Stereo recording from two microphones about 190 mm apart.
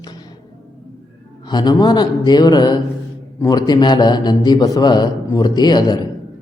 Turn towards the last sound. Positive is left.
turn(degrees=20)  # may be behind; listen again after turning